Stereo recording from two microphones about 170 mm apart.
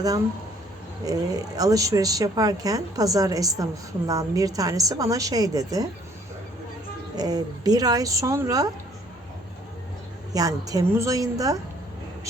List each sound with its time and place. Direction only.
1.0 s speech: 20° right (ahead or behind)
7.2 s speech: 20° right (ahead or behind)
10.3 s speech: 20° right (ahead or behind)